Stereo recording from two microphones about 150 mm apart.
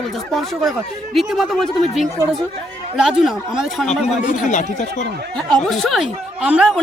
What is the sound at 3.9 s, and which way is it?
Speech, 55° left (ahead or behind).